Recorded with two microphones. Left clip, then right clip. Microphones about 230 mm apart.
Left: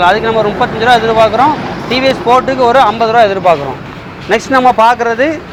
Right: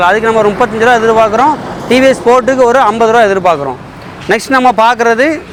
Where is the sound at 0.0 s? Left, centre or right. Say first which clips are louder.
Right 1 dB; right.